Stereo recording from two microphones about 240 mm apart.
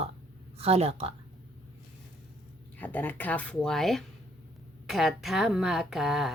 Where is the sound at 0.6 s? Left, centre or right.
Right.